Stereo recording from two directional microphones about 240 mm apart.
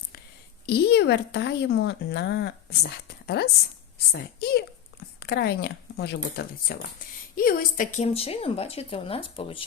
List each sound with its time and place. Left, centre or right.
0.6 s a woman's voice: left
7.9 s speech: left